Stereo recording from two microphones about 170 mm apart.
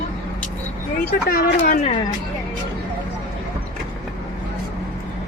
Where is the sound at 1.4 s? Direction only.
55° left (ahead or behind).